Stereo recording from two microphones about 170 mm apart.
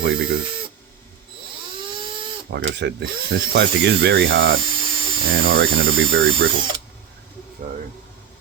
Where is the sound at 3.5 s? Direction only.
75° right (ahead or behind); by 4.4 s 90° right.